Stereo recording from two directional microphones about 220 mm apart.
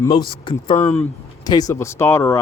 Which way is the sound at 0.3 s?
25° left (ahead or behind).